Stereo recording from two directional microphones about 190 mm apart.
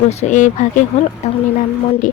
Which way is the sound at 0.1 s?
35° left (ahead or behind).